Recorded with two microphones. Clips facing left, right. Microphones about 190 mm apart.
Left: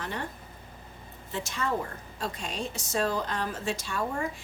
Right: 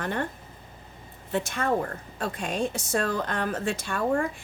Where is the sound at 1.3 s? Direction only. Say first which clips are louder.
Right 5 dB; 55° right (ahead or behind).